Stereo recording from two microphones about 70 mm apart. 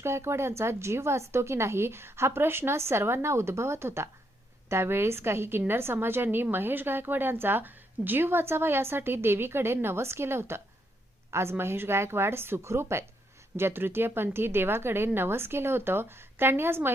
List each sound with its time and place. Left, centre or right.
0.0 s a woman's voice: right